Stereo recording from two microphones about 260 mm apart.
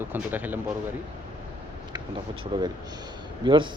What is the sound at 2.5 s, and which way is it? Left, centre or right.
A man's voice, centre.